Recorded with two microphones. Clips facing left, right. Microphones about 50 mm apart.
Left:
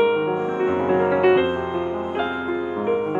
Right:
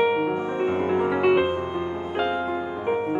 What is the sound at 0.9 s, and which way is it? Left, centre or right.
Music, left.